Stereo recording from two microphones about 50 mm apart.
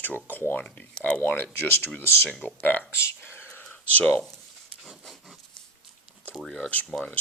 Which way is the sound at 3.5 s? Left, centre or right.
Left.